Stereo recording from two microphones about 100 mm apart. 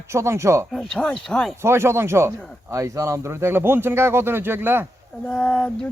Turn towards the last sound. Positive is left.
turn(degrees=15)  # may be behind; listen again after turning